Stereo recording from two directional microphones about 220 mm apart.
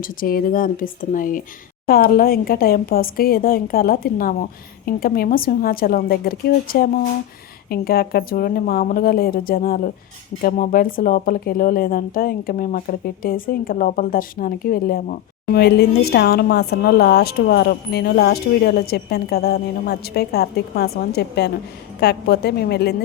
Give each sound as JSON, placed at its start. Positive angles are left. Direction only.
{"t": 0.0, "sound": "speech", "side_deg": 40}